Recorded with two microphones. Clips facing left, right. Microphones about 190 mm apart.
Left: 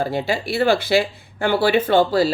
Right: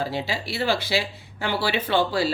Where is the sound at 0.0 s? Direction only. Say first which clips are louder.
Left 6 dB; 50° left (ahead or behind).